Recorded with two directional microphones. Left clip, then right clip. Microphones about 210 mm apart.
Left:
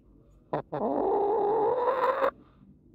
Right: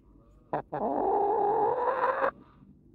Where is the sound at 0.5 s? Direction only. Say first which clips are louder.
Left 1 dB; 20° left (ahead or behind).